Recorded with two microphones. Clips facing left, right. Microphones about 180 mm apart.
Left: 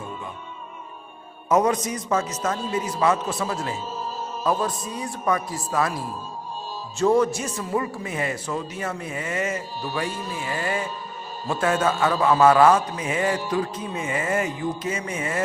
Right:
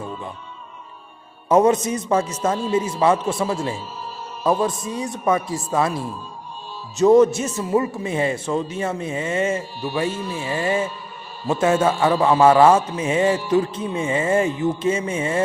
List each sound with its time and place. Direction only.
1.5 s speech: 25° right (ahead or behind)
7.0 s speech: 20° right (ahead or behind)